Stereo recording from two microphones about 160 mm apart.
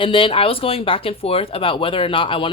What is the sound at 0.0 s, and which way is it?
Speech, 30° left (ahead or behind).